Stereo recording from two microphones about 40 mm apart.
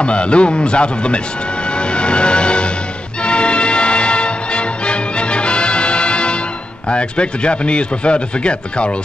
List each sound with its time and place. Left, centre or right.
0.0 s speech: left
3.2 s music: left
6.9 s speech: left